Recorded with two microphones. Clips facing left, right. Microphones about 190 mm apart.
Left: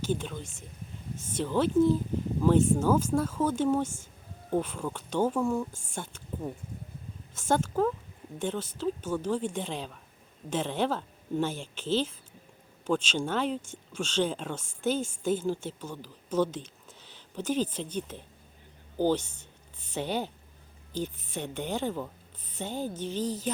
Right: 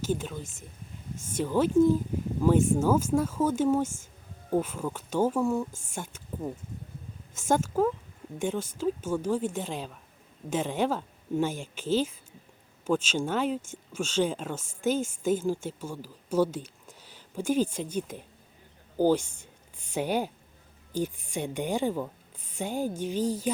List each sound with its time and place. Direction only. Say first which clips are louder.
0.2 s speech: right 1 dB; 5° right (ahead or behind)